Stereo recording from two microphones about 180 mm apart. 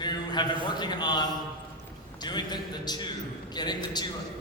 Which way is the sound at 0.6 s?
25° left (ahead or behind).